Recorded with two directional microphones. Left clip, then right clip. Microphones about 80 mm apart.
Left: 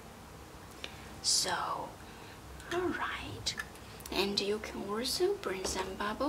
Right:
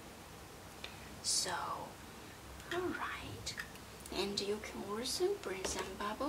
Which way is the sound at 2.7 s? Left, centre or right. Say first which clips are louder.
Left 5 dB; centre.